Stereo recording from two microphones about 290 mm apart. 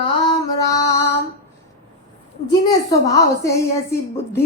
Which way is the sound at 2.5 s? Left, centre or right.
Centre.